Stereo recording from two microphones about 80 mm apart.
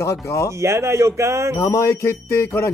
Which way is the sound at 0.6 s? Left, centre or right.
Right.